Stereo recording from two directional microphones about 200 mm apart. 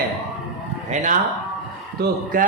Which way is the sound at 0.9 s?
40° right (ahead or behind).